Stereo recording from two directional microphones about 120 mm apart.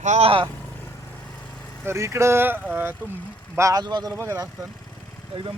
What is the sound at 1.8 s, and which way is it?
Speech, 25° right (ahead or behind).